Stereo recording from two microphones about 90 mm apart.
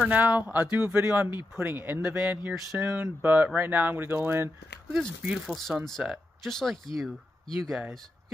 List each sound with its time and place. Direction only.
0.0 s speech: 20° right (ahead or behind)
5.5 s speech: centre (ahead or behind)